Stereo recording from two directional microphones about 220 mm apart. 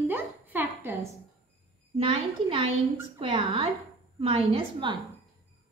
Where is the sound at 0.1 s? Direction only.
10° right (ahead or behind).